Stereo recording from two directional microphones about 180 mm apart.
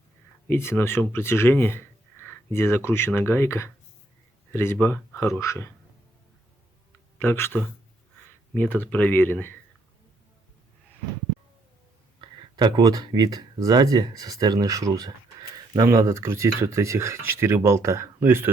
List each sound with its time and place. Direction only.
0.4 s speech: 15° left (ahead or behind)
7.2 s speech: 10° left (ahead or behind)
12.2 s speech: 25° right (ahead or behind)